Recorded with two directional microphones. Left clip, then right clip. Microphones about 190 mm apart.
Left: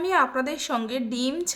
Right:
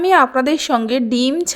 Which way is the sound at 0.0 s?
40° right (ahead or behind).